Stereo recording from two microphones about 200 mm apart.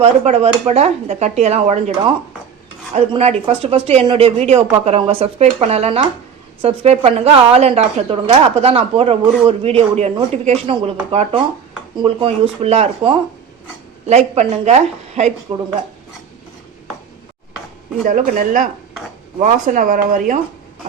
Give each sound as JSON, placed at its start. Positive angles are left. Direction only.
{"t": 0.0, "sound": "speech", "side_deg": -30}
{"t": 3.1, "sound": "speech", "side_deg": -30}
{"t": 18.0, "sound": "speech", "side_deg": -40}